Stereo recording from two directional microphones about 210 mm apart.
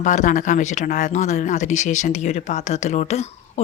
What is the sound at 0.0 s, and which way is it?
Speech, 35° left (ahead or behind).